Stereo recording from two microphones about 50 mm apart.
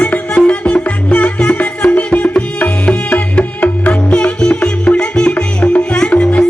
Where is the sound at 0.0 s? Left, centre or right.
Left.